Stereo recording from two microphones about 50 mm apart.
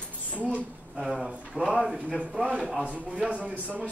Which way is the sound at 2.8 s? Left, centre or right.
Right.